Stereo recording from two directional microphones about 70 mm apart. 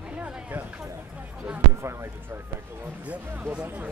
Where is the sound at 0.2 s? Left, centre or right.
Right.